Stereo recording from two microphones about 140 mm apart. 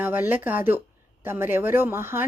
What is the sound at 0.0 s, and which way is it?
Speech, 15° right (ahead or behind).